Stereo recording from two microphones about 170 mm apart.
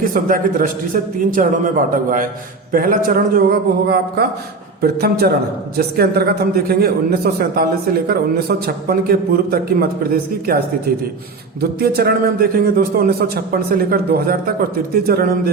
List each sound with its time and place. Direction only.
0.1 s a man's voice: 55° right (ahead or behind)